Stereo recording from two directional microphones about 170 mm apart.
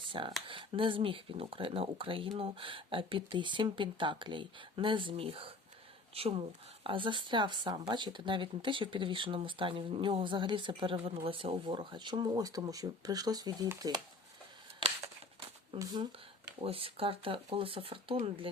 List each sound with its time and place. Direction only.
0.1 s speech: 30° right (ahead or behind)
14.8 s a sound: 35° right (ahead or behind)
15.8 s speech: 25° right (ahead or behind)